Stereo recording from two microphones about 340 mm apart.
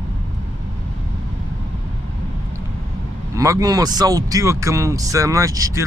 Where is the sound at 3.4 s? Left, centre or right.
Centre.